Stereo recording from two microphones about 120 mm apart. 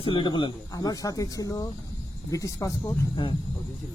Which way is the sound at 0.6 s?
30° left (ahead or behind).